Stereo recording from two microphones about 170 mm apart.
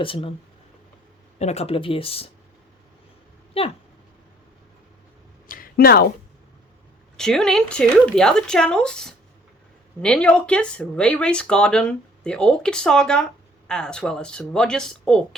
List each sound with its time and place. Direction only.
0.0 s speech: 30° left (ahead or behind)
1.4 s speech: 40° left (ahead or behind)
3.6 s speech: 35° left (ahead or behind)
5.5 s a sound: 60° left (ahead or behind)
7.2 s speech: 5° left (ahead or behind)